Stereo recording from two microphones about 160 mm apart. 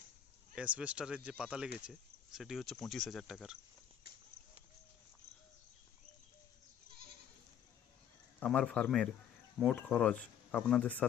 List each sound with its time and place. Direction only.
0.5 s speech: 5° right (ahead or behind)
8.4 s speech: 5° left (ahead or behind)